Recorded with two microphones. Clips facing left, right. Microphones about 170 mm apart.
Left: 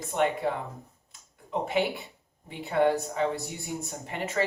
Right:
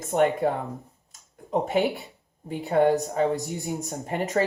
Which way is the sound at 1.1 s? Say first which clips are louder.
Right 6 dB; 40° right (ahead or behind).